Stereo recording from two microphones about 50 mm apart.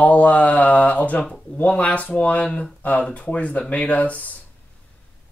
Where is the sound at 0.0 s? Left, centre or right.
Left.